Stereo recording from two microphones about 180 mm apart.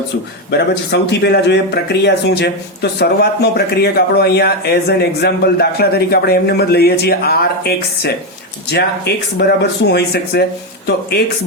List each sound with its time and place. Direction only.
0.5 s speech: 65° left (ahead or behind)
9.4 s speech: 65° left (ahead or behind)